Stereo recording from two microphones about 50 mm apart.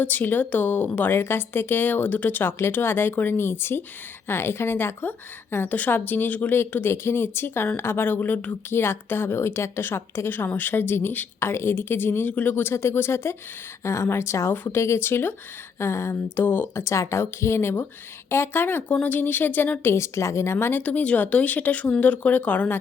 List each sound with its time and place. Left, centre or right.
0.0 s speech: left
1.1 s a woman's voice: left
2.7 s a woman's voice: left
5.6 s speech: left
6.9 s a woman's voice: left
11.3 s a woman's voice: left
12.6 s a woman's voice: left
13.8 s speech: left
14.1 s a woman's voice: left
15.8 s speech: left
16.3 s a woman's voice: left
16.7 s a woman's voice: left
19.8 s a woman's voice: left
20.8 s speech: left